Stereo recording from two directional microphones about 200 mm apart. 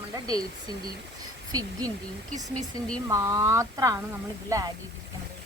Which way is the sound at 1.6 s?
20° right (ahead or behind).